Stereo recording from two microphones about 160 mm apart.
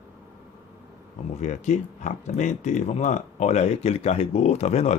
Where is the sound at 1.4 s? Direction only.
50° left (ahead or behind).